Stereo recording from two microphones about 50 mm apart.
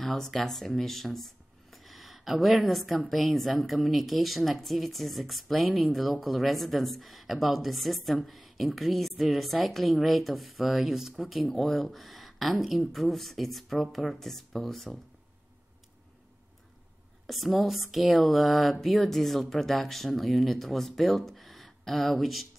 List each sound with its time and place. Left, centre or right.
0.0 s speech: centre
11.4 s speech: centre
17.3 s speech: centre